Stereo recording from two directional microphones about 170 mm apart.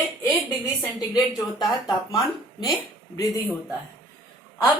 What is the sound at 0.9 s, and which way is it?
A woman's voice, 25° left (ahead or behind).